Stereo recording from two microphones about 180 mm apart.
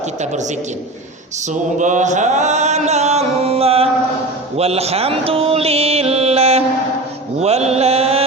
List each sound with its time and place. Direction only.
1.8 s chant: 45° right (ahead or behind)
4.5 s mantra: 35° right (ahead or behind)